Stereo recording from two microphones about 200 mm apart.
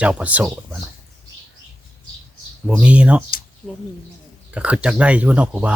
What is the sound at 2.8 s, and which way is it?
Speech, 5° right (ahead or behind).